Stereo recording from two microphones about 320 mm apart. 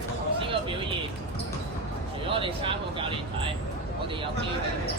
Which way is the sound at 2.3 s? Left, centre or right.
Centre.